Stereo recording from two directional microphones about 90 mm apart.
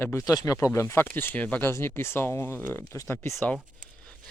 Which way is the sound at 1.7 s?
30° left (ahead or behind).